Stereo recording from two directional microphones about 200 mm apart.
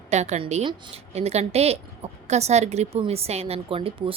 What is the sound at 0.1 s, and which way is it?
A woman's voice, 35° right (ahead or behind).